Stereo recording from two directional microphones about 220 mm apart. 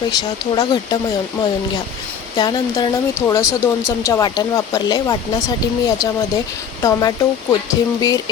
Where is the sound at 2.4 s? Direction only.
20° left (ahead or behind).